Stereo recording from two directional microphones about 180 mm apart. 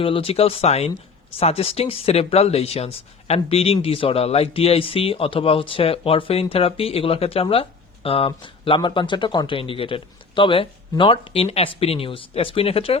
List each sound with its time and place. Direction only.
0.0 s speech: 30° left (ahead or behind)